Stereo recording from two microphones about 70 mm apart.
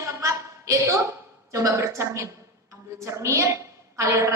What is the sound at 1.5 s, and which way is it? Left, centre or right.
A woman's voice, right.